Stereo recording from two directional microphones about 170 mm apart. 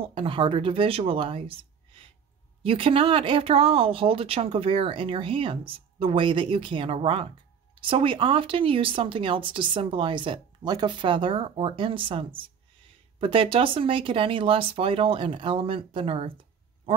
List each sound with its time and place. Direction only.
0.0 s speech: 35° right (ahead or behind)